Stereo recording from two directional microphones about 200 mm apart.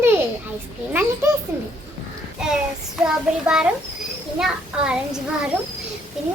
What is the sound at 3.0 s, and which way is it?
Child singing, 5° right (ahead or behind).